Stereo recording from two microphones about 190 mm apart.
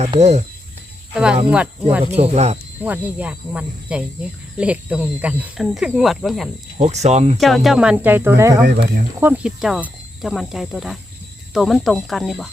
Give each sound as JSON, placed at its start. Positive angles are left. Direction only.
{"t": 0.0, "sound": "speech", "side_deg": -35}
{"t": 1.1, "sound": "speech", "side_deg": -5}
{"t": 2.1, "sound": "speech", "side_deg": -35}
{"t": 2.8, "sound": "speech", "side_deg": -5}
{"t": 6.7, "sound": "speech", "side_deg": -35}
{"t": 7.3, "sound": "speech", "side_deg": 0}
{"t": 9.2, "sound": "speech", "side_deg": -5}